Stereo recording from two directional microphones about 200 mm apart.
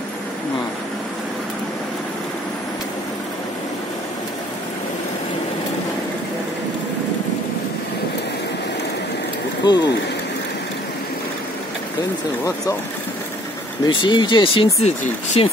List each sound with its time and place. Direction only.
9.6 s speech: 20° left (ahead or behind)
13.8 s speech: 25° left (ahead or behind)